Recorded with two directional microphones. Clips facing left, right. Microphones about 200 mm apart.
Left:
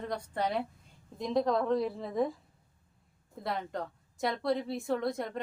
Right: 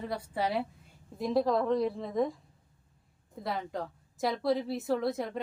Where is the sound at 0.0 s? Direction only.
5° right (ahead or behind).